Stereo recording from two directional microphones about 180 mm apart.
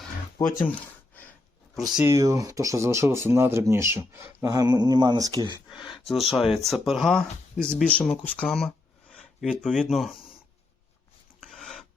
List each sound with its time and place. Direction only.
0.4 s speech: 20° left (ahead or behind)
1.7 s speech: centre (ahead or behind)
2.0 s speech: 20° right (ahead or behind)
5.9 s speech: centre (ahead or behind)
11.3 s filing: centre (ahead or behind)